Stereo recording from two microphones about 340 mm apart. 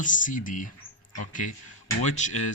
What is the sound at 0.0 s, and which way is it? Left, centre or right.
Speech, left.